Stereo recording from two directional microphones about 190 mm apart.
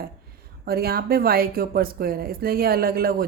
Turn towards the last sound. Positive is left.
turn(degrees=-50)  # may be behind; listen again after turning